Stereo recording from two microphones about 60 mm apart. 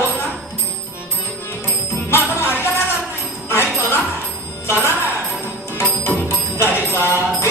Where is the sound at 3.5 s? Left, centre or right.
Left.